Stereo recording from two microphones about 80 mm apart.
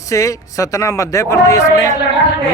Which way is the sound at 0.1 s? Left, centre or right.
Left.